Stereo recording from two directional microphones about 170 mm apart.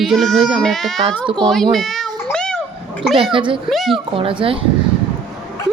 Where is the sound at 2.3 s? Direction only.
5° left (ahead or behind).